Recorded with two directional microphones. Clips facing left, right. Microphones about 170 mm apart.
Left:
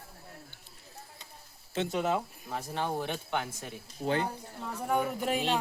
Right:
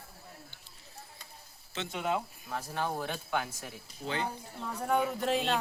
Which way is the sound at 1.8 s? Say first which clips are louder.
Left 4 dB; 40° left (ahead or behind).